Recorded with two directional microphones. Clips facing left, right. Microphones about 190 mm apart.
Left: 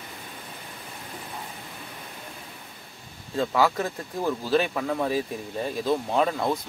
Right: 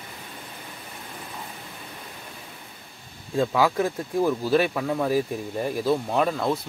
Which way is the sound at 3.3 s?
10° right (ahead or behind).